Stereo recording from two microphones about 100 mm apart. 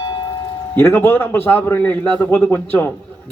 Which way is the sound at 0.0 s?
45° left (ahead or behind).